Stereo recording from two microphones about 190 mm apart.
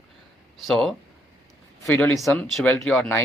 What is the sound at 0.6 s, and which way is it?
Speech, centre (ahead or behind).